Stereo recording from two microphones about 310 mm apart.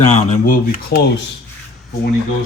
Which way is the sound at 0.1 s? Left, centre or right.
Left.